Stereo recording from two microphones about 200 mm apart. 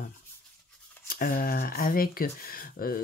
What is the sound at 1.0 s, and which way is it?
Speech, 45° left (ahead or behind).